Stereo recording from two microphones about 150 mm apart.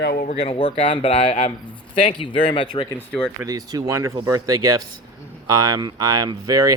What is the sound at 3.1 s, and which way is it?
Speech, 5° left (ahead or behind).